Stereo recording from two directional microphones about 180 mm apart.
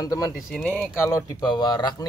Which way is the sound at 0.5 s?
Centre (ahead or behind).